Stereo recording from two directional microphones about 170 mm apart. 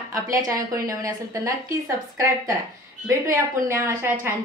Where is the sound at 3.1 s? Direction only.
15° right (ahead or behind).